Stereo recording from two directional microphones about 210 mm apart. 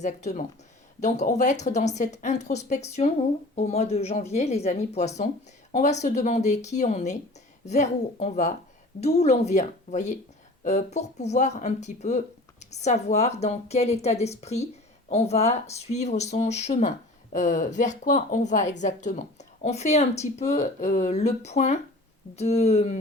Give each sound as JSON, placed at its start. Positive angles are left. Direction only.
{"t": 0.0, "sound": "speech", "side_deg": 35}